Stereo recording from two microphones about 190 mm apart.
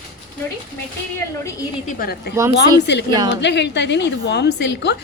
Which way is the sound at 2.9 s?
65° left (ahead or behind).